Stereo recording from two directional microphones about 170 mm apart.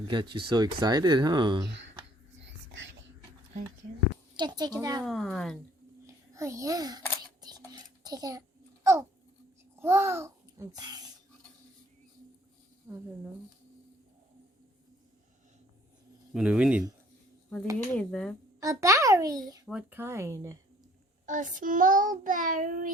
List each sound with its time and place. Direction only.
0.1 s speech: 30° right (ahead or behind)
2.4 s whispering: 90° right
4.4 s speech: 25° right (ahead or behind)
5.0 s speech: centre (ahead or behind)
6.1 s a child's voice: 15° right (ahead or behind)
7.4 s a sound: 25° right (ahead or behind)
9.8 s a child's voice: 15° right (ahead or behind)
12.9 s speech: 10° right (ahead or behind)
16.3 s speech: 5° right (ahead or behind)
17.9 s speech: 5° left (ahead or behind)
18.6 s speech: 20° right (ahead or behind)
19.6 s speech: 10° right (ahead or behind)
21.2 s child singing: 50° right (ahead or behind)